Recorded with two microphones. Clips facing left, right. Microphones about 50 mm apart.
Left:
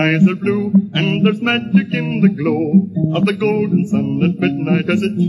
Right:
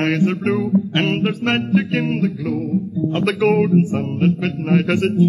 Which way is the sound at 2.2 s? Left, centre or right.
Left.